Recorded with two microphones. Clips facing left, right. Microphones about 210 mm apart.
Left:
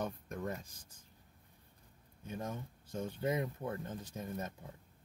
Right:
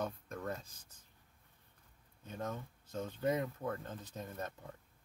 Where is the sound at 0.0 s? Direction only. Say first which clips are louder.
Left 1 dB; 15° left (ahead or behind).